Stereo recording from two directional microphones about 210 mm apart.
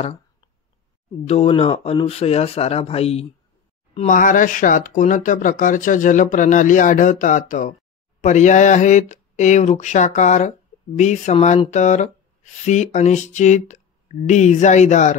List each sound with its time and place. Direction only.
1.2 s speech: 30° left (ahead or behind)